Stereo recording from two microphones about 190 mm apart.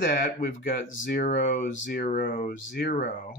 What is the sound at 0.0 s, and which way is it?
Speech, 50° left (ahead or behind).